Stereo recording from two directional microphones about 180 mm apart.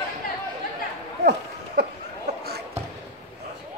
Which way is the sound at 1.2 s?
65° right (ahead or behind).